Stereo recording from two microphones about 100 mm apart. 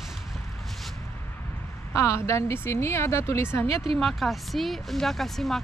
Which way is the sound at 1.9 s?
30° left (ahead or behind).